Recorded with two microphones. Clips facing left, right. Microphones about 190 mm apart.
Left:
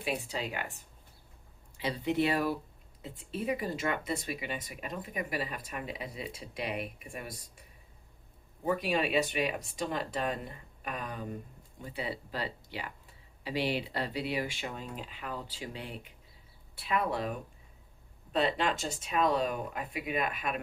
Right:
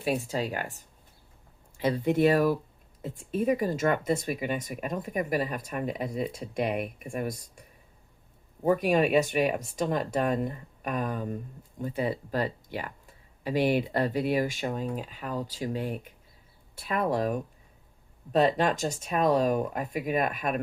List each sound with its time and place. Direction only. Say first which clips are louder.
0.0 s speech: right 6 dB; 40° right (ahead or behind)
1.8 s speech: right 6 dB; 45° right (ahead or behind)
8.6 s speech: right 7 dB; 45° right (ahead or behind)